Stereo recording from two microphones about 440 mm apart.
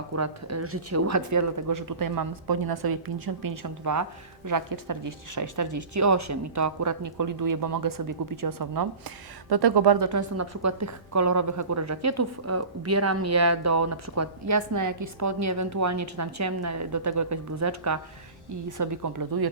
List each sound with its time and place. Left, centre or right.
0.2 s a woman's voice: right
10.1 s a woman's voice: right
18.8 s speech: right